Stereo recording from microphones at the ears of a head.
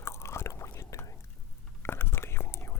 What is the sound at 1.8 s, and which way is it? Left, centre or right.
Whispering, left.